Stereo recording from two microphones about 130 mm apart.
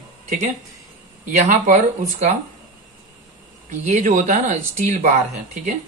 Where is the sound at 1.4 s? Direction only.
60° right (ahead or behind).